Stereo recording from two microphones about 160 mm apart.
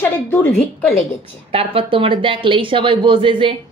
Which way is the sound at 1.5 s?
35° right (ahead or behind).